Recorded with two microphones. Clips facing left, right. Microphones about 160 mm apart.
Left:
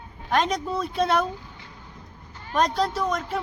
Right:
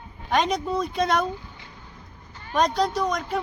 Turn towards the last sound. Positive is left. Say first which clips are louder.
# right 1 dB
turn(degrees=5)  # may be behind; listen again after turning